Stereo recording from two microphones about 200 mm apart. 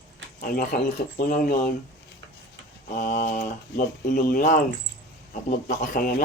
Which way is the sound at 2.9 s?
40° left (ahead or behind).